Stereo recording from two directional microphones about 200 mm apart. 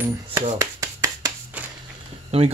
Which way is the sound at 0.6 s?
15° right (ahead or behind).